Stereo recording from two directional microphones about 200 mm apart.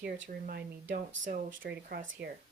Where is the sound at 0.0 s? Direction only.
50° right (ahead or behind).